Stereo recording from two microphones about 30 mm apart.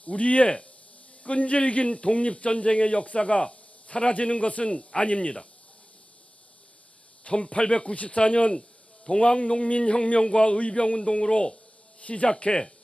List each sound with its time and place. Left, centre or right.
0.0 s a man's voice: left
7.3 s a man's voice: left
11.9 s speech: left